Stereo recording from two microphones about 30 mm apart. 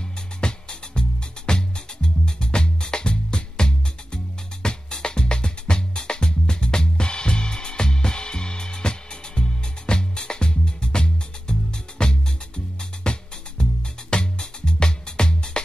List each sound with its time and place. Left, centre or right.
0.4 s music: left